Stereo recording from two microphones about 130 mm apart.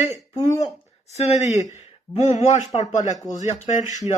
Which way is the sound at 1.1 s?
55° left (ahead or behind).